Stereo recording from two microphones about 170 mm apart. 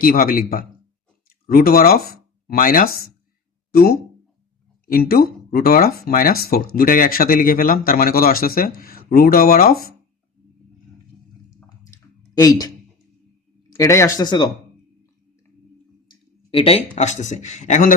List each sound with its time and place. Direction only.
0.0 s speech: 55° left (ahead or behind)
11.9 s clicking: 20° left (ahead or behind)
13.7 s speech: 15° left (ahead or behind)
16.5 s speech: 35° left (ahead or behind)